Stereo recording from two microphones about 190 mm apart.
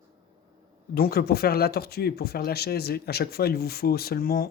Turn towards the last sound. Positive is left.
turn(degrees=50)  # may be behind; listen again after turning